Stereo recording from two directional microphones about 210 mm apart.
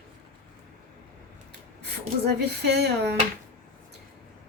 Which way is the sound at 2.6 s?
50° right (ahead or behind).